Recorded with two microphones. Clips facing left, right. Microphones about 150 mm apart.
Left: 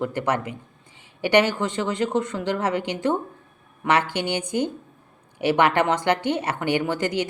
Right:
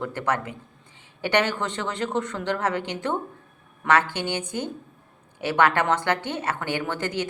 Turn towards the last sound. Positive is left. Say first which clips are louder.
# left 4 dB
turn(degrees=15)  # may be behind; listen again after turning